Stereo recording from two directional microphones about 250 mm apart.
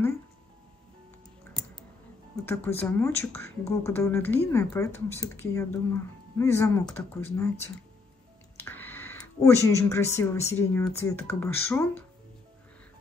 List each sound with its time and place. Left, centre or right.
2.4 s speech: centre